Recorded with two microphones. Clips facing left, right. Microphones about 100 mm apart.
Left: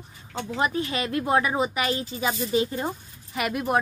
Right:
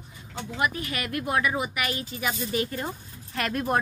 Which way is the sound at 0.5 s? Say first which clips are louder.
Left 3 dB; 25° left (ahead or behind).